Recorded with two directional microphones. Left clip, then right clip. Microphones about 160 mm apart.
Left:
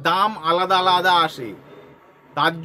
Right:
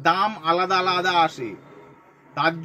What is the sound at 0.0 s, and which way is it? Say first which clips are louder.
Speech: left 2 dB; 20° left (ahead or behind).